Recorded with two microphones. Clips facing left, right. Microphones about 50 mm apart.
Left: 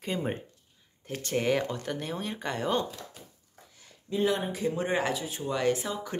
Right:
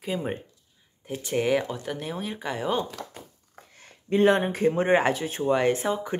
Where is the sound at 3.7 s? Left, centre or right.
Right.